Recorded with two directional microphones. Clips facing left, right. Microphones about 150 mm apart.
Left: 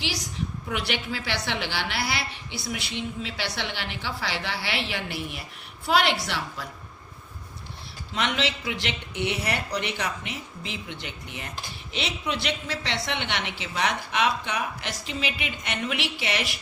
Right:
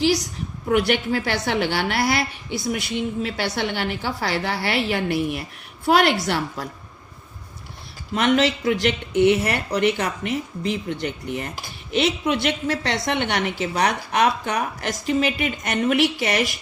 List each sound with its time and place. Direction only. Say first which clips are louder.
0.7 s a woman's voice: right 12 dB; 50° right (ahead or behind)
8.1 s a woman's voice: right 9 dB; 50° right (ahead or behind)
11.9 s a woman's voice: right 10 dB; 55° right (ahead or behind)